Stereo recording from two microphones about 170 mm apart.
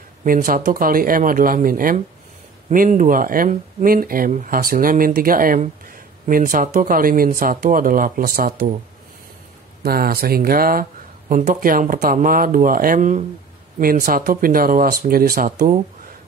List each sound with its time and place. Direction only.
0.2 s speech: 55° right (ahead or behind)
9.8 s speech: 60° right (ahead or behind)